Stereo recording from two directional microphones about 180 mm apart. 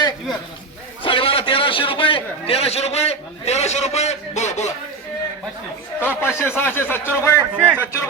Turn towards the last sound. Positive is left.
turn(degrees=-10)  # may be behind; listen again after turning